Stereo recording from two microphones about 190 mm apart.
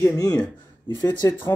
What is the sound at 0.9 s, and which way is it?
Speech, 20° left (ahead or behind).